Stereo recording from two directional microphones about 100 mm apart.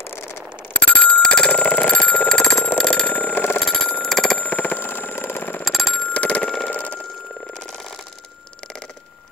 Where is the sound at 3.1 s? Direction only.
20° left (ahead or behind).